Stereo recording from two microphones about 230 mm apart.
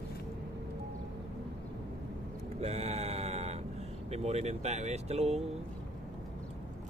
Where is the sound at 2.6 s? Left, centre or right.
Right.